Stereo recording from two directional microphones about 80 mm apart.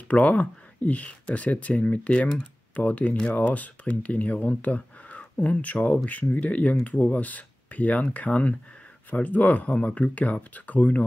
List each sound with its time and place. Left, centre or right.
0.1 s speech: centre